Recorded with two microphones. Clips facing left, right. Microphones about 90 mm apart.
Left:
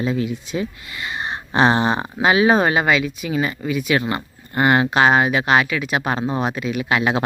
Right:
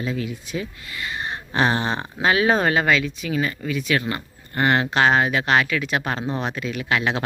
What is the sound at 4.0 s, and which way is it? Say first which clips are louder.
Speech: left 3 dB; 25° left (ahead or behind).